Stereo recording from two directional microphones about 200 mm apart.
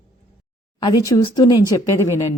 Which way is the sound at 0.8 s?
20° left (ahead or behind).